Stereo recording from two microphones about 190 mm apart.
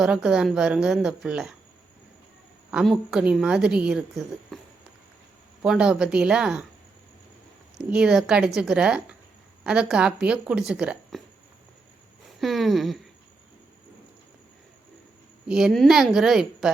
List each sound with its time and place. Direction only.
0.0 s a woman's voice: 5° right (ahead or behind)
2.6 s a woman's voice: 5° right (ahead or behind)
5.6 s a woman's voice: 5° right (ahead or behind)
7.8 s a woman's voice: 5° right (ahead or behind)
12.4 s a woman's voice: centre (ahead or behind)
15.4 s a woman's voice: centre (ahead or behind)